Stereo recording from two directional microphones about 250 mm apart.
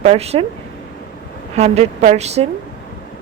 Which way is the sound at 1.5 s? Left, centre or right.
Right.